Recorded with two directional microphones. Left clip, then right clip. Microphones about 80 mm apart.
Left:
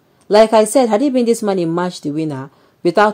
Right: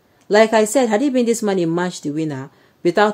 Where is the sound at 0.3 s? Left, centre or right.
Left.